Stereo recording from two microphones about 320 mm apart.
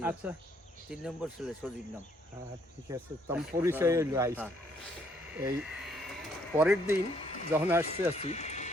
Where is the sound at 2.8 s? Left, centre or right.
Centre.